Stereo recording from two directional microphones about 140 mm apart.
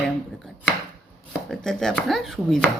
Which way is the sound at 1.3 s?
5° left (ahead or behind).